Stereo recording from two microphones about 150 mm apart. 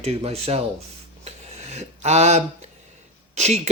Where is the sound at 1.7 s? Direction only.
50° right (ahead or behind).